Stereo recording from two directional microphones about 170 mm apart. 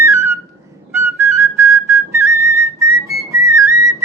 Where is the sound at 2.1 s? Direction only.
15° right (ahead or behind).